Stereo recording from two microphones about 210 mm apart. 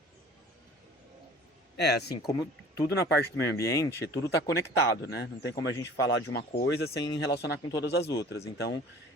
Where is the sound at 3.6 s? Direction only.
15° left (ahead or behind).